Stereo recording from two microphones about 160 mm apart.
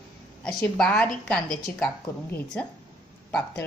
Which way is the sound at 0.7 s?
10° left (ahead or behind).